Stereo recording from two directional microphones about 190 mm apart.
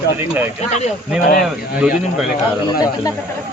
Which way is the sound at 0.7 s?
35° left (ahead or behind).